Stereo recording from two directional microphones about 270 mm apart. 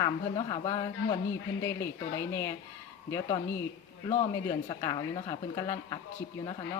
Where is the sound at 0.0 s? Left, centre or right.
Centre.